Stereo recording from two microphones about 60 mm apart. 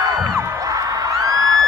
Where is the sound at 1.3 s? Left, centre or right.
Right.